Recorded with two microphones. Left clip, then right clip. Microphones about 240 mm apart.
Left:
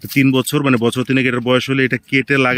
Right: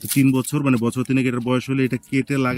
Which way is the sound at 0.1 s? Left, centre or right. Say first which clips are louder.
Left 5 dB; left.